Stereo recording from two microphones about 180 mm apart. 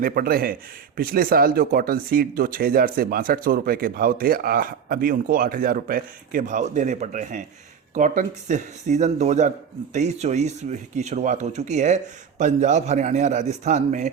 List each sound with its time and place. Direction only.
0.0 s speech: 55° right (ahead or behind)